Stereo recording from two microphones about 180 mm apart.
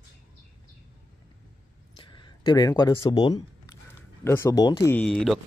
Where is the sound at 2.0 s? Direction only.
25° left (ahead or behind).